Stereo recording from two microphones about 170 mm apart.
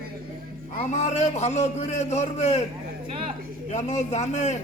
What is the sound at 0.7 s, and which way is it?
A man's voice, 40° left (ahead or behind).